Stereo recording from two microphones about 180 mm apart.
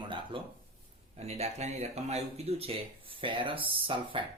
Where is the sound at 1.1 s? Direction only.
35° right (ahead or behind).